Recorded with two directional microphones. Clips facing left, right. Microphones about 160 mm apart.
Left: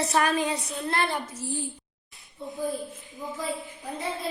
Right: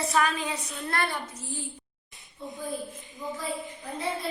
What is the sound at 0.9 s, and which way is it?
Child singing, 25° left (ahead or behind).